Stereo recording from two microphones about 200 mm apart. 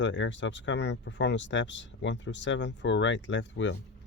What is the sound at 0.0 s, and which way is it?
Speech, 65° left (ahead or behind).